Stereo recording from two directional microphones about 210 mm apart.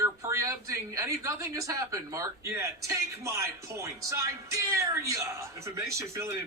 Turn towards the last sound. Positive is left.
turn(degrees=-15)  # may be behind; listen again after turning